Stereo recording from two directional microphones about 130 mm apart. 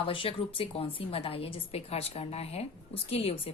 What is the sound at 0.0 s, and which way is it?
A woman's voice, 45° left (ahead or behind).